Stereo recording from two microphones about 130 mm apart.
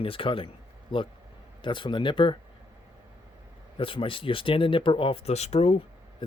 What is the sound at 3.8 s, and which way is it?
Speech, 45° left (ahead or behind).